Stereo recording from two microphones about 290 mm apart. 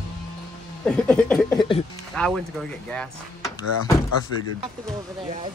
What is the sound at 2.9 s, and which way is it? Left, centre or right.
Speech, centre.